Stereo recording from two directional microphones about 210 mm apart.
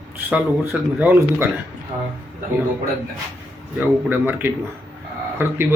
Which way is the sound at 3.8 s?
10° right (ahead or behind).